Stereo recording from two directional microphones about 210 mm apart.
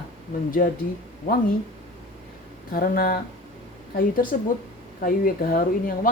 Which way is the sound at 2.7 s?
45° left (ahead or behind).